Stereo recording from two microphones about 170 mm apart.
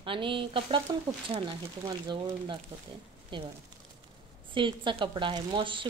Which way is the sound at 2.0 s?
25° right (ahead or behind).